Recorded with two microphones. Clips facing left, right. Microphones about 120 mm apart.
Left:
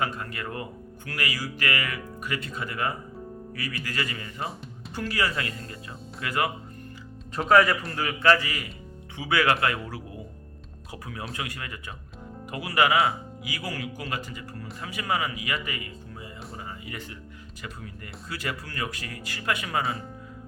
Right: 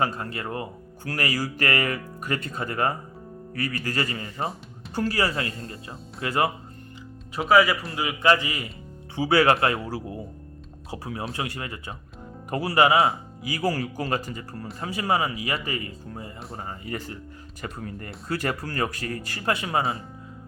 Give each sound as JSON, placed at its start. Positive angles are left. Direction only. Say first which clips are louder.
{"t": 0.0, "sound": "speech", "louder": "right 3 dB", "side_deg": -35}
{"t": 7.3, "sound": "speech", "louder": "right 1 dB", "side_deg": -5}
{"t": 7.9, "sound": "speech", "louder": "right 1 dB", "side_deg": -15}